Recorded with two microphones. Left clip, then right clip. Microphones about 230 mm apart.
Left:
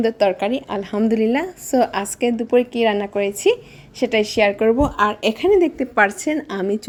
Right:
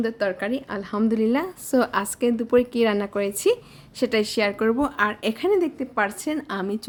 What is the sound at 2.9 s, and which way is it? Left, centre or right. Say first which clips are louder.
Speech: left 5 dB; centre.